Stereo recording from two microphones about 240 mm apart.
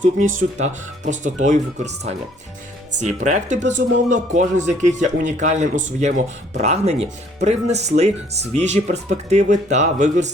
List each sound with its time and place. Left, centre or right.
0.3 s speech: right
3.0 s speech: right